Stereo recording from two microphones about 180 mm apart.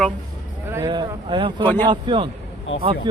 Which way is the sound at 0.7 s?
20° right (ahead or behind).